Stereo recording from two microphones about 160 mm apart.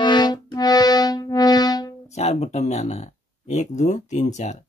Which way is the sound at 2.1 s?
45° left (ahead or behind).